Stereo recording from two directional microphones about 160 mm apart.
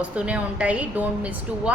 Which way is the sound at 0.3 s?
10° right (ahead or behind).